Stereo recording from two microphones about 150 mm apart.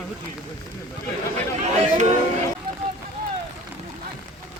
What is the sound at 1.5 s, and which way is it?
Speech, 50° right (ahead or behind).